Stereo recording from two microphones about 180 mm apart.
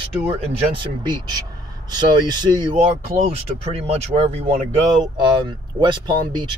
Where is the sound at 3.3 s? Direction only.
35° right (ahead or behind).